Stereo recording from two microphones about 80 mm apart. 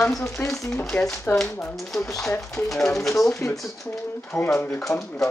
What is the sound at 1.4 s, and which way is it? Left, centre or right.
Speech, left.